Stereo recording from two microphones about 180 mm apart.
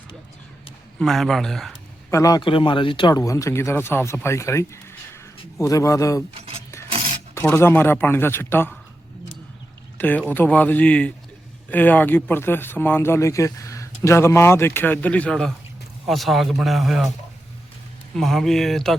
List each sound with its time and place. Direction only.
0.9 s speech: centre (ahead or behind)
2.0 s speech: 20° left (ahead or behind)
7.3 s speech: 15° left (ahead or behind)
10.0 s speech: 10° left (ahead or behind)
18.2 s speech: centre (ahead or behind)